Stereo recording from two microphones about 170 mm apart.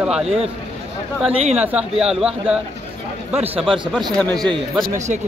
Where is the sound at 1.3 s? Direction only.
40° right (ahead or behind).